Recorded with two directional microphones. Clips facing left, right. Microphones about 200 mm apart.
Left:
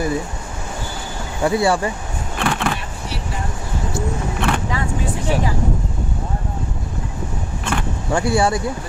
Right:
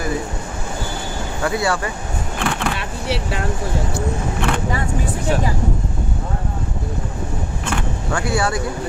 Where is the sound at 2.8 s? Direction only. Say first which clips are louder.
Right 6 dB; 75° right (ahead or behind).